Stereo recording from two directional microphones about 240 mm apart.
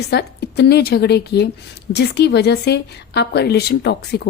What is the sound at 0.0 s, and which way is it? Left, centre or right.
A woman's voice, left.